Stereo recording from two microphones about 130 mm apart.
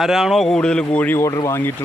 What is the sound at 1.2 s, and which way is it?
Speech, 25° left (ahead or behind).